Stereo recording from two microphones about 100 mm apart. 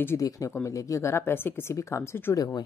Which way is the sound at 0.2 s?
35° left (ahead or behind).